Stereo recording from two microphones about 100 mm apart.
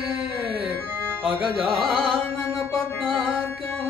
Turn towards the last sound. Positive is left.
turn(degrees=5)  # may be behind; listen again after turning